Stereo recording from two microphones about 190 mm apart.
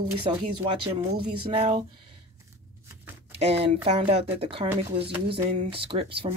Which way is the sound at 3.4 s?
30° right (ahead or behind).